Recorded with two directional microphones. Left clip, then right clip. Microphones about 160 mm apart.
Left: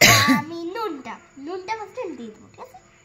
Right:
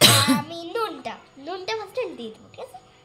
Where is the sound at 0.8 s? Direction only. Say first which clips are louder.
Left 1 dB; 30° right (ahead or behind).